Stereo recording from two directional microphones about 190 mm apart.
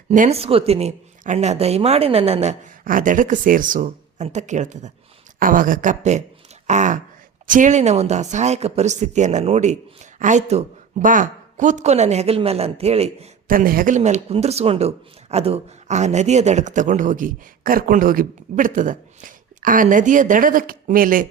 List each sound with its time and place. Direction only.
0.1 s speech: 40° right (ahead or behind)
2.8 s a man's voice: 45° right (ahead or behind)
13.5 s a man's voice: 50° right (ahead or behind)